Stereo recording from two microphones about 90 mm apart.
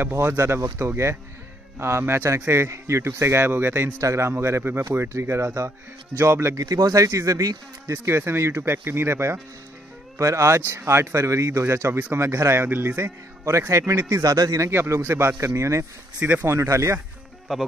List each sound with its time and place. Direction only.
0.0 s a man's voice: 20° right (ahead or behind); by 14.7 s 40° right (ahead or behind)
14.7 s a man's voice: 30° right (ahead or behind)
16.2 s speech: 20° right (ahead or behind)
16.5 s a man's voice: 35° right (ahead or behind)